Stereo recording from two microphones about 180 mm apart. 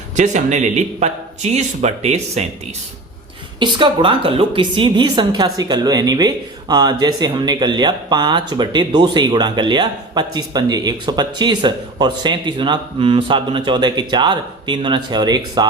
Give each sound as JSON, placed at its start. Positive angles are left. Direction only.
{"t": 0.2, "sound": "a man's voice", "side_deg": -40}
{"t": 3.6, "sound": "a woman's voice", "side_deg": -25}